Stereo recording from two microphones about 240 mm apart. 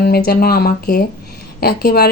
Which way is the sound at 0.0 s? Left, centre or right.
Left.